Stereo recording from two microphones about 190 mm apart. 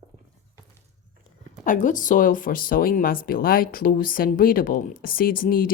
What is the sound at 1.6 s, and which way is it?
Speech, 45° left (ahead or behind).